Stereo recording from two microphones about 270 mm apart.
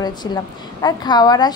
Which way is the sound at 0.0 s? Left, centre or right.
Centre.